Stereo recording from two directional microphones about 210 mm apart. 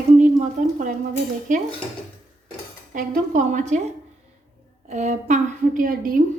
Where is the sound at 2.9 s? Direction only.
35° right (ahead or behind).